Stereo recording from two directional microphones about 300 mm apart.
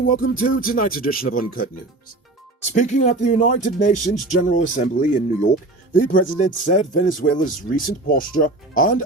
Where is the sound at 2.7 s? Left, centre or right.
Left.